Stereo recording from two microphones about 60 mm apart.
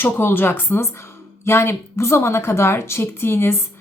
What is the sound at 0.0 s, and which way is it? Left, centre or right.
Speech, left.